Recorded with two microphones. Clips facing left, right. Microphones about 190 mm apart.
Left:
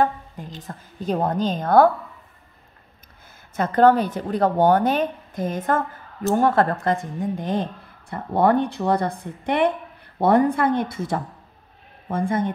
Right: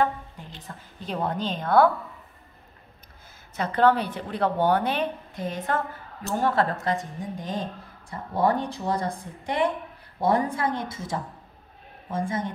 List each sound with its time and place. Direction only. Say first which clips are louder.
0.0 s a woman's voice: left 3 dB; 45° left (ahead or behind)
3.5 s a woman's voice: left 5 dB; 45° left (ahead or behind)